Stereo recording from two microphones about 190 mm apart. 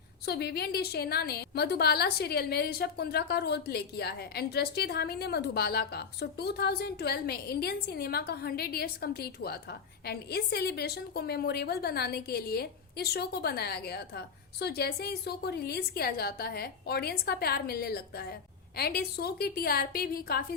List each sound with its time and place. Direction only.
0.3 s a woman's voice: 60° left (ahead or behind)